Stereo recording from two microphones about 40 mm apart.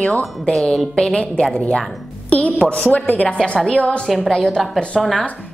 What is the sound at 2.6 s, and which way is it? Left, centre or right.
Speech, left.